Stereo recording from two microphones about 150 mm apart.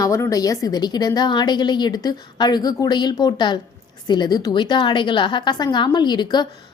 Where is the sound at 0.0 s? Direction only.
20° left (ahead or behind).